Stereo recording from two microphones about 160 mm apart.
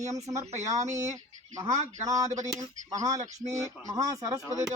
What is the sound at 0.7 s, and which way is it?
Speech, 20° right (ahead or behind).